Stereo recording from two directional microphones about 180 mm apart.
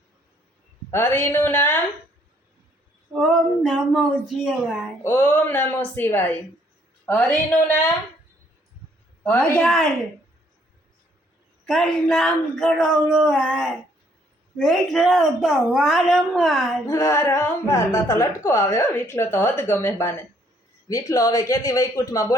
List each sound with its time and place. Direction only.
0.9 s a woman's voice: 10° left (ahead or behind)
3.1 s a woman's voice: centre (ahead or behind)
9.2 s a woman's voice: 5° left (ahead or behind)
11.6 s a woman's voice: centre (ahead or behind)
16.8 s a woman's voice: 15° left (ahead or behind)